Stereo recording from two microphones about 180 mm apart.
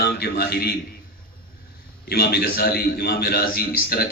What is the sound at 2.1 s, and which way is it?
A man's voice, 60° left (ahead or behind).